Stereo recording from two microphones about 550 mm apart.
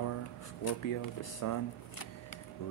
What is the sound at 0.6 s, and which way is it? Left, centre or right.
Speech, left.